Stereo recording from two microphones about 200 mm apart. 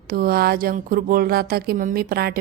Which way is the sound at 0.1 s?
50° right (ahead or behind).